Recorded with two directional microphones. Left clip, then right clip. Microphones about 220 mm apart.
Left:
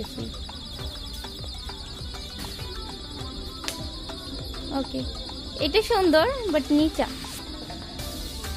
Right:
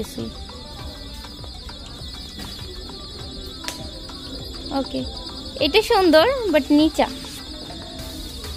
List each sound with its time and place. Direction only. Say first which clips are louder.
4.7 s speech: right 5 dB; 15° right (ahead or behind)